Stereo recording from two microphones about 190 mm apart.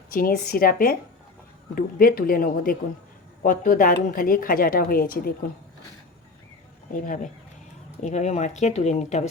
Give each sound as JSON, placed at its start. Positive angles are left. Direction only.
{"t": 0.1, "sound": "a woman's voice", "side_deg": 50}
{"t": 8.0, "sound": "speech", "side_deg": 35}